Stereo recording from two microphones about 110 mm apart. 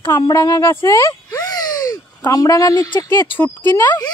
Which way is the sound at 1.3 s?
35° left (ahead or behind).